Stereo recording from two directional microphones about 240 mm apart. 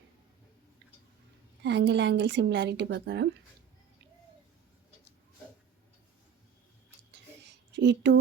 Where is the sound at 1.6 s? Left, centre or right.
Right.